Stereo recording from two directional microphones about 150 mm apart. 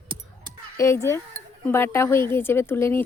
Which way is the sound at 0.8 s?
20° left (ahead or behind).